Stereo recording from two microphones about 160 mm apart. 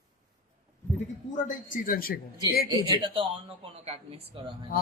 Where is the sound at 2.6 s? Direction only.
30° right (ahead or behind).